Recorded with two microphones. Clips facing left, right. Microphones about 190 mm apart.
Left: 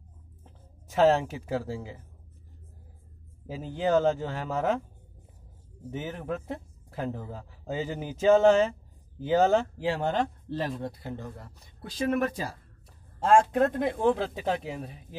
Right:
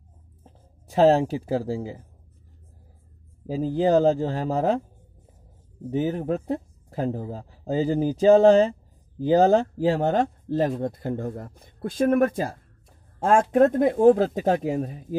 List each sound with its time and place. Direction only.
0.4 s speech: 35° right (ahead or behind)
3.4 s speech: 35° right (ahead or behind)
5.9 s speech: 35° right (ahead or behind)